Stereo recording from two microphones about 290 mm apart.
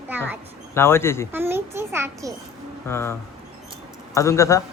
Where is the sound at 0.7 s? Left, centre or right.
Centre.